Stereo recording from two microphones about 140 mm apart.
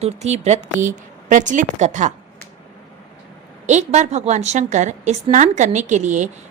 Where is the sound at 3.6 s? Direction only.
55° right (ahead or behind).